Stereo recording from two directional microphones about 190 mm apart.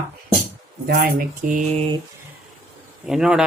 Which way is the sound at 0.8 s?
50° right (ahead or behind).